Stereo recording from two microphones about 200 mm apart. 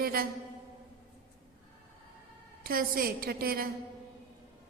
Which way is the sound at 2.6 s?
45° right (ahead or behind).